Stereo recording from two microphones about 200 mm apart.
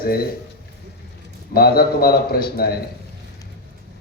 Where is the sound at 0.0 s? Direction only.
50° left (ahead or behind).